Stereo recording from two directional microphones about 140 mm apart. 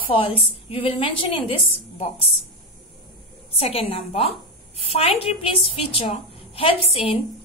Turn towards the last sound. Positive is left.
turn(degrees=45)  # may be behind; listen again after turning